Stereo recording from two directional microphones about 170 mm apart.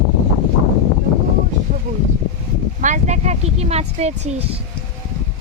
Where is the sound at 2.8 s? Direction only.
45° right (ahead or behind).